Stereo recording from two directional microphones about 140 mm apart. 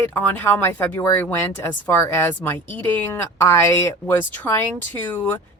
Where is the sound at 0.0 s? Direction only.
15° left (ahead or behind).